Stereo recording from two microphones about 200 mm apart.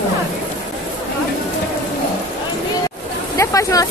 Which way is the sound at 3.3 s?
15° left (ahead or behind).